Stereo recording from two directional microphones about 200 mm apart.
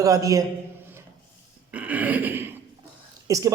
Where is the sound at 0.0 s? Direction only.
15° right (ahead or behind).